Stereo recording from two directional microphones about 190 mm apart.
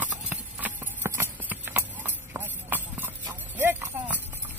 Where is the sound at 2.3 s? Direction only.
10° right (ahead or behind).